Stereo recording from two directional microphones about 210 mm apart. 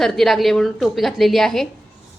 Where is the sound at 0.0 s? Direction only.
Centre (ahead or behind).